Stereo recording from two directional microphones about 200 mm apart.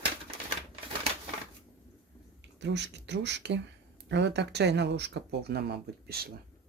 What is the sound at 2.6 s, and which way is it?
Speech, 60° right (ahead or behind).